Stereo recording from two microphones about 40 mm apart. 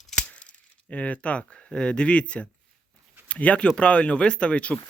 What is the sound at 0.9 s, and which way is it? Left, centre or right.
Speech, left.